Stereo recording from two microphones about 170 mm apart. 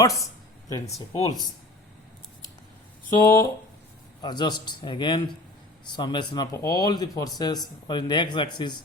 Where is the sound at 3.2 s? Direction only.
20° left (ahead or behind).